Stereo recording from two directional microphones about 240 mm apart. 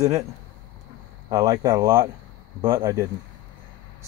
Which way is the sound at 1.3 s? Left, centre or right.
Centre.